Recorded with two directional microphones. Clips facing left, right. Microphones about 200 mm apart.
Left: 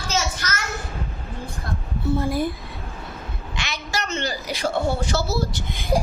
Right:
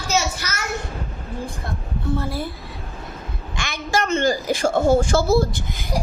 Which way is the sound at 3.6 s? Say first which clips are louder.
Right 6 dB; 50° right (ahead or behind).